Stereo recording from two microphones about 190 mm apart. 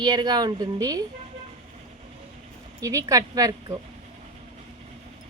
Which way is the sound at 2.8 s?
20° right (ahead or behind).